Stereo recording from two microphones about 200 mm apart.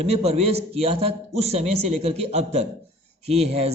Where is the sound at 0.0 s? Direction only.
30° right (ahead or behind).